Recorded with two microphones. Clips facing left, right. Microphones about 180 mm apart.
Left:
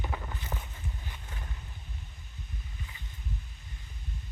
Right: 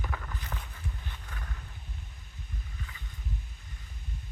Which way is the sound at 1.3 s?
25° left (ahead or behind).